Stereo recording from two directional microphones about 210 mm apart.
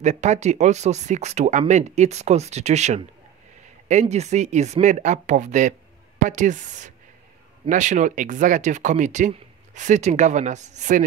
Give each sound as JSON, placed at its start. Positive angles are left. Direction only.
{"t": 0.0, "sound": "speech", "side_deg": -35}